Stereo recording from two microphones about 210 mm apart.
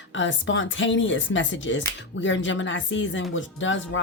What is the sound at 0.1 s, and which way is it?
A woman's voice, 65° left (ahead or behind).